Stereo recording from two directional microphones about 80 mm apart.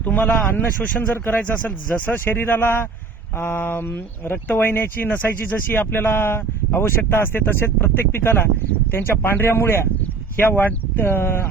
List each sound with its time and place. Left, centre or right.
0.0 s speech: centre